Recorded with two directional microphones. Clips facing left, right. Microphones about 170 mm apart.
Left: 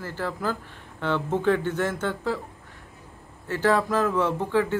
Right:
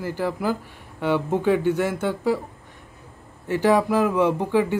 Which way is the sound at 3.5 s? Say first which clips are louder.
Right 4 dB; 15° right (ahead or behind).